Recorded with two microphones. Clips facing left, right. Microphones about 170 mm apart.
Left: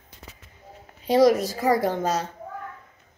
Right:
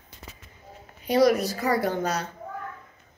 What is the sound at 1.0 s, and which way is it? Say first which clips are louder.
A woman's voice: left 2 dB; 25° left (ahead or behind).